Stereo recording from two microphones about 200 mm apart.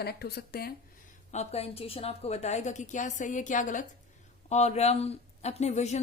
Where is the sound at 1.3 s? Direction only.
35° left (ahead or behind).